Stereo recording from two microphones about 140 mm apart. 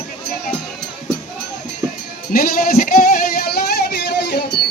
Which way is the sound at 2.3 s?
90° left.